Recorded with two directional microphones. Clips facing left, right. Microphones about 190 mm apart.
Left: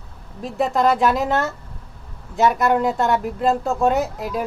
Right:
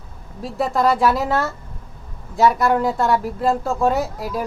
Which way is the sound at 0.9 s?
Centre (ahead or behind).